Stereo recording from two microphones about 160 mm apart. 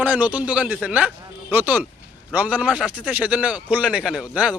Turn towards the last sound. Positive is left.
turn(degrees=-10)  # may be behind; listen again after turning